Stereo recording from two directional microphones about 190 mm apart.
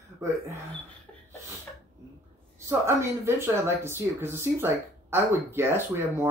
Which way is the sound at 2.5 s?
15° right (ahead or behind).